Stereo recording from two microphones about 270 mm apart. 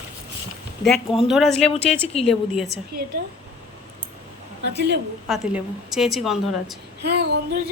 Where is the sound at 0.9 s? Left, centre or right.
Centre.